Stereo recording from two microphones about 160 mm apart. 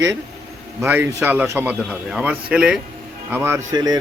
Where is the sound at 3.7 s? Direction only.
25° right (ahead or behind).